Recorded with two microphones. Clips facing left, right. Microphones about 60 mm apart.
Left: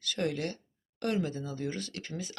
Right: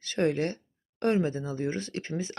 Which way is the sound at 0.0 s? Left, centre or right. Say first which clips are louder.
Right 6 dB; right.